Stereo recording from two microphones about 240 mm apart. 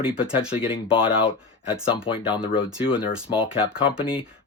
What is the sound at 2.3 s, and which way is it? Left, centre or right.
Speech, centre.